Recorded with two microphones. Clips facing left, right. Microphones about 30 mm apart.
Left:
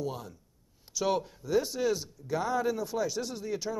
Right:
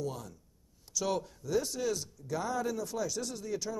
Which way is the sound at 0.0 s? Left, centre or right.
Left.